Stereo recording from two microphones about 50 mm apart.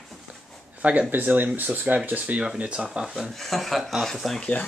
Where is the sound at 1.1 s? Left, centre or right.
Right.